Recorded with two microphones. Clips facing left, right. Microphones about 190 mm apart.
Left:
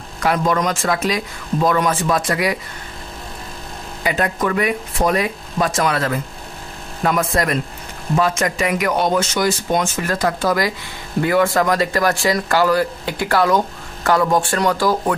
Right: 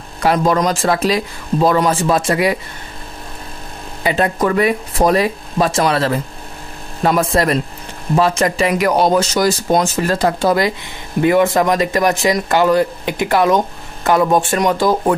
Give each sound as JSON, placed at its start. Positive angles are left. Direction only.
{"t": 0.2, "sound": "speech", "side_deg": -35}
{"t": 4.0, "sound": "speech", "side_deg": -30}